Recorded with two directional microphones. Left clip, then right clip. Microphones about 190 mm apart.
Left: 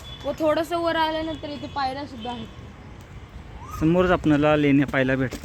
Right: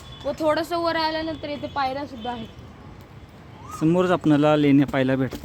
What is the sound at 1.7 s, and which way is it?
Speech, 10° right (ahead or behind).